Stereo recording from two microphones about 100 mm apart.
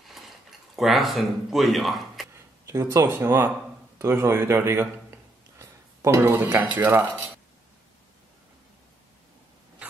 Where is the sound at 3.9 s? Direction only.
25° right (ahead or behind).